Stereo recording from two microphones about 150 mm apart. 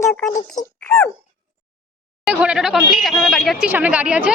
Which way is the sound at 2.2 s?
5° right (ahead or behind).